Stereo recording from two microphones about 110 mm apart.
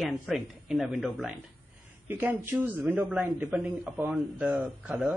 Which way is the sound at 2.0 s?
20° right (ahead or behind).